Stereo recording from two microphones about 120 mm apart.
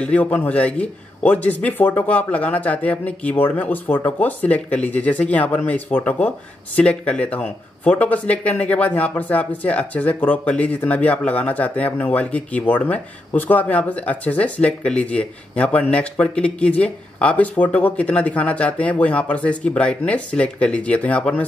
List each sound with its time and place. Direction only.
0.0 s a man's voice: 10° left (ahead or behind)